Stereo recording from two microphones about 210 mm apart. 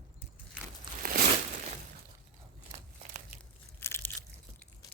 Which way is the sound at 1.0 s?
45° right (ahead or behind).